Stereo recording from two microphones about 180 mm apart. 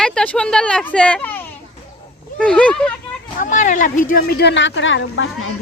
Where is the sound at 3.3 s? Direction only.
45° left (ahead or behind).